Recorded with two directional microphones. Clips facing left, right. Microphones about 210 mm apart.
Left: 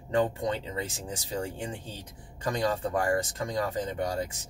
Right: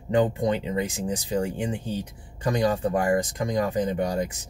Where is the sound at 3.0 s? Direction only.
15° right (ahead or behind).